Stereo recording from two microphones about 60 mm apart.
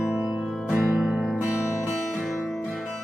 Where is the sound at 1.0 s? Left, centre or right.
Centre.